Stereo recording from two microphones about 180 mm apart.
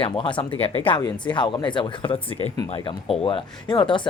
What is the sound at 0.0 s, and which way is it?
Speech, 30° left (ahead or behind).